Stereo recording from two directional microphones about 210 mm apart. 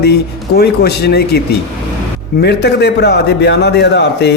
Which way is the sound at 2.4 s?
50° left (ahead or behind).